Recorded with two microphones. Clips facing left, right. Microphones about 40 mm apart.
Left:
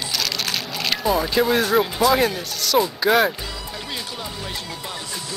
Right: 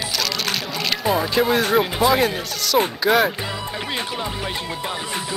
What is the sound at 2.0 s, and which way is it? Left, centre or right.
Speech, right.